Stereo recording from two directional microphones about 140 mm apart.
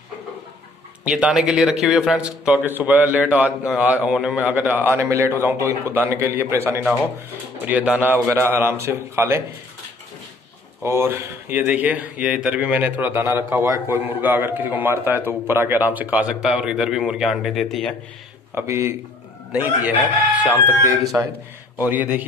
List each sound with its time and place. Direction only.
1.0 s speech: 10° right (ahead or behind)
10.8 s speech: 20° right (ahead or behind); by 17.9 s centre (ahead or behind)
18.5 s speech: 15° right (ahead or behind)
21.7 s speech: 15° right (ahead or behind)